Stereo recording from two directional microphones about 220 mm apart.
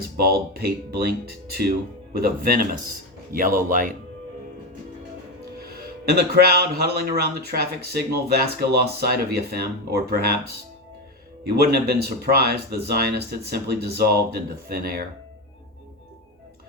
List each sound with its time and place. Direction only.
0.2 s speech: 45° right (ahead or behind)
5.5 s speech: 45° right (ahead or behind)
11.5 s speech: 45° right (ahead or behind)